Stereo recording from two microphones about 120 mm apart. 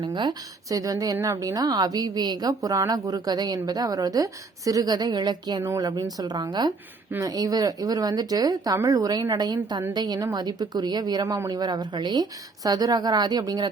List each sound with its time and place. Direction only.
0.0 s a woman's voice: 40° right (ahead or behind)